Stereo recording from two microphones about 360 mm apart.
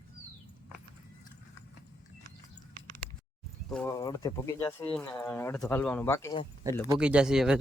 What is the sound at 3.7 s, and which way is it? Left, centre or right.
Speech, centre.